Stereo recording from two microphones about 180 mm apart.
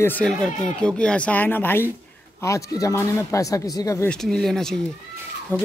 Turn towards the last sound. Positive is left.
turn(degrees=10)  # may be behind; listen again after turning